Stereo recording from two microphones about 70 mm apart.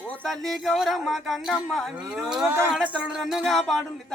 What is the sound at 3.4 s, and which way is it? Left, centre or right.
Speech, centre.